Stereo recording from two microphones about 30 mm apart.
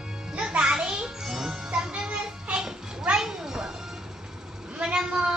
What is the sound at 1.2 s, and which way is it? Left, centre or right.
Speech, centre.